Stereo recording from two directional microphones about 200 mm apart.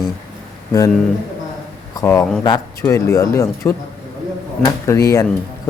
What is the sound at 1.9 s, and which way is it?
Speech, 15° left (ahead or behind).